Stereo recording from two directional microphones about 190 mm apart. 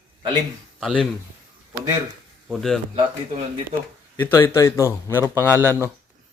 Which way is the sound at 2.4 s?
Centre (ahead or behind).